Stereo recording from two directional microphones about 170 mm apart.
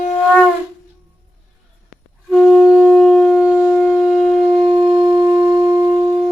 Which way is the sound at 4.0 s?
Centre (ahead or behind).